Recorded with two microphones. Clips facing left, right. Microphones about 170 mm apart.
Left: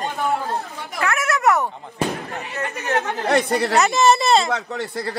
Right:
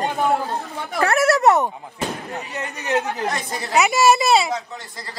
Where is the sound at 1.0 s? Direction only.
35° right (ahead or behind).